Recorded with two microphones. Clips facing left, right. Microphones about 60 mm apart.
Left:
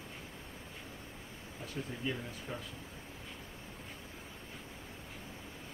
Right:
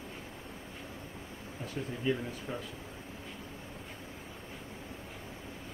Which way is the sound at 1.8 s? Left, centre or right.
Centre.